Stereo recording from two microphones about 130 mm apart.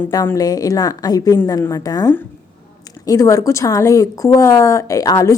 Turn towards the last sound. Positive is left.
turn(degrees=25)  # may be behind; listen again after turning